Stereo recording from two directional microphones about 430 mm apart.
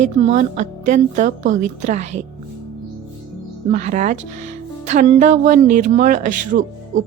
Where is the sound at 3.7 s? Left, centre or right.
Centre.